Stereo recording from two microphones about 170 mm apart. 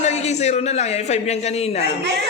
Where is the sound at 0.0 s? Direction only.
40° left (ahead or behind).